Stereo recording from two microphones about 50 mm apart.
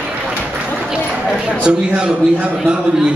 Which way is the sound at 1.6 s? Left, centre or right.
Right.